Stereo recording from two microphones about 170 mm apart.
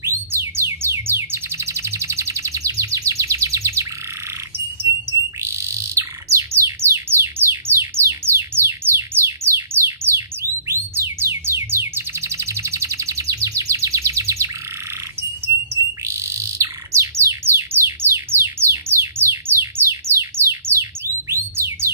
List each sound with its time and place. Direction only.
0.0 s bird: 15° right (ahead or behind)
5.4 s bird: 15° right (ahead or behind)
21.3 s a sound: 15° right (ahead or behind)